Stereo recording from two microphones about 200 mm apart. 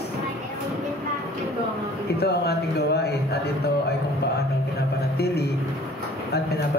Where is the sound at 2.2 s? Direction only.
55° left (ahead or behind).